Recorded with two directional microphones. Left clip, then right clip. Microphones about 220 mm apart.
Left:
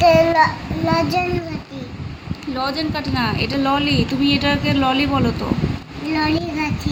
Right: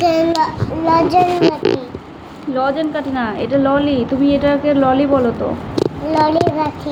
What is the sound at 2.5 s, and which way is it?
Speech, 65° left (ahead or behind).